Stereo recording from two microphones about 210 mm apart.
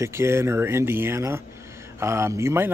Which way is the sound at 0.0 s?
10° right (ahead or behind).